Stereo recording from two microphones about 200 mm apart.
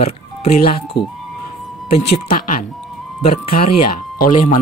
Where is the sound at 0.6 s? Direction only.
45° left (ahead or behind).